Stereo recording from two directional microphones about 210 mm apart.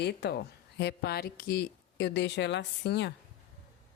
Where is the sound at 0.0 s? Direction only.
50° left (ahead or behind).